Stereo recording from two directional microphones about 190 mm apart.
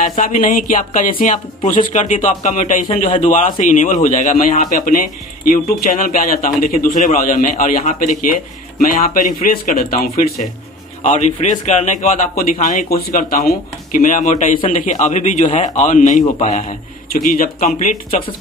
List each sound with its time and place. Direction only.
0.0 s a man's voice: 40° left (ahead or behind)
11.1 s a man's voice: 40° left (ahead or behind)